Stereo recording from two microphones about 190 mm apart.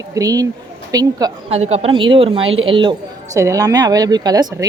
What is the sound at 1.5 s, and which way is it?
Speech, 35° right (ahead or behind).